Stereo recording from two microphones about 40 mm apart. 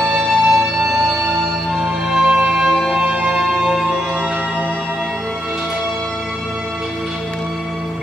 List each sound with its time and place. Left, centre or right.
0.0 s music: centre
1.8 s music: centre
3.0 s music: right
3.7 s music: centre